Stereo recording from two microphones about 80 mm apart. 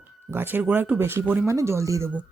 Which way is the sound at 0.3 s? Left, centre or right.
Right.